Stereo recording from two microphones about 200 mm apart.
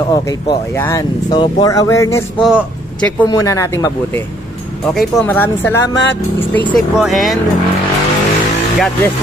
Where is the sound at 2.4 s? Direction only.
5° right (ahead or behind).